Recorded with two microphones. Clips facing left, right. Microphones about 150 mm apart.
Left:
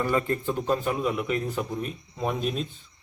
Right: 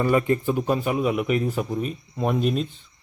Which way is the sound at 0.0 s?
15° right (ahead or behind).